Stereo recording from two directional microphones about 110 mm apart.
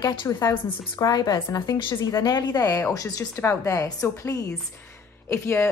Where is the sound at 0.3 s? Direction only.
30° left (ahead or behind).